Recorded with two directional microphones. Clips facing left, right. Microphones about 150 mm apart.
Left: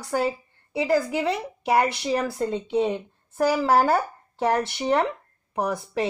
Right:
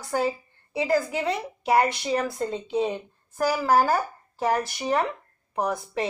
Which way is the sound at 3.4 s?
25° left (ahead or behind).